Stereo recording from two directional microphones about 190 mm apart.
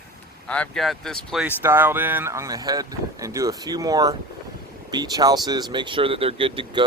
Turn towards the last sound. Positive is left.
turn(degrees=-25)  # may be behind; listen again after turning